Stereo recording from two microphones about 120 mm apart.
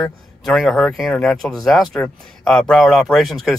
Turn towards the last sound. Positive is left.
turn(degrees=0)  # may be behind; listen again after turning